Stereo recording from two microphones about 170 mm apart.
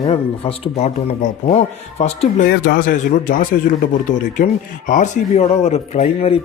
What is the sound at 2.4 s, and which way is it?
Speech, 70° left (ahead or behind).